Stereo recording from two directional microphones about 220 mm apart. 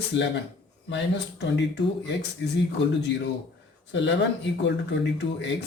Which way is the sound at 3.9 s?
55° left (ahead or behind).